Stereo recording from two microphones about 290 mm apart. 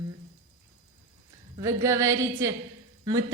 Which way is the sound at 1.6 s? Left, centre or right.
Centre.